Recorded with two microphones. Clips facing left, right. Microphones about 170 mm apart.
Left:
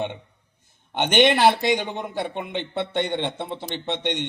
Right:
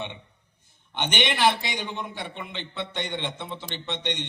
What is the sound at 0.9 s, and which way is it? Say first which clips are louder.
A man's voice: left 8 dB; 50° left (ahead or behind).